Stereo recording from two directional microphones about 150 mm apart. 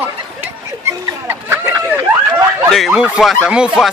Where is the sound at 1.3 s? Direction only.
15° right (ahead or behind).